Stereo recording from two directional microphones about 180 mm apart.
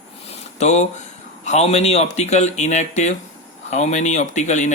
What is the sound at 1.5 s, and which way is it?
Speech, 35° left (ahead or behind).